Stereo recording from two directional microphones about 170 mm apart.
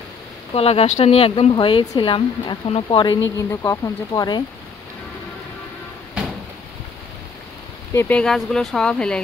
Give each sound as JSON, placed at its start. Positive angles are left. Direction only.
{"t": 0.6, "sound": "speech", "side_deg": 35}
{"t": 3.3, "sound": "speech", "side_deg": 15}
{"t": 7.9, "sound": "speech", "side_deg": 10}